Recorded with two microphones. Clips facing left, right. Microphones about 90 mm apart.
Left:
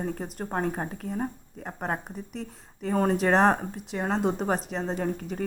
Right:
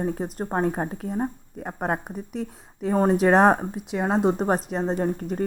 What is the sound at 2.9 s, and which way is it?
Speech, 20° right (ahead or behind).